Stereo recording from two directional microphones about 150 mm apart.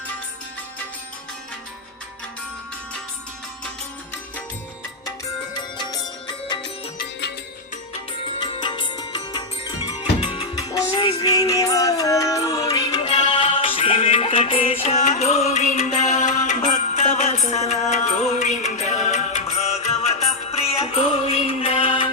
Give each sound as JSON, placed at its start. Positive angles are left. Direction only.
{"t": 5.5, "sound": "music", "side_deg": 30}
{"t": 8.4, "sound": "music", "side_deg": 30}